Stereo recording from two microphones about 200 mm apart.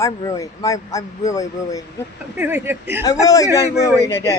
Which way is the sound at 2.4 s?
10° right (ahead or behind).